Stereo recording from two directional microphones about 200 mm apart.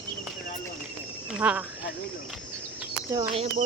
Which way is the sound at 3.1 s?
30° right (ahead or behind).